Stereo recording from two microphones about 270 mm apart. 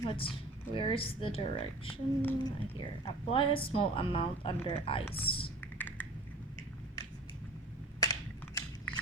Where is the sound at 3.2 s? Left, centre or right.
Centre.